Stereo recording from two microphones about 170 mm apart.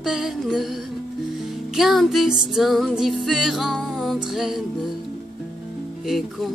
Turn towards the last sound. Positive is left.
turn(degrees=0)  # may be behind; listen again after turning